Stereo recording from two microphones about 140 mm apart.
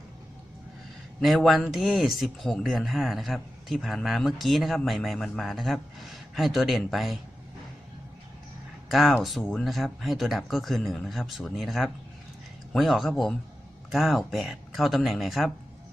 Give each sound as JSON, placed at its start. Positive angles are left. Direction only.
{"t": 1.2, "sound": "speech", "side_deg": 0}
{"t": 8.9, "sound": "speech", "side_deg": 0}